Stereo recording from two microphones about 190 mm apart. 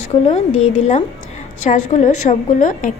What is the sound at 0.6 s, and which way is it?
A woman's voice, 35° left (ahead or behind).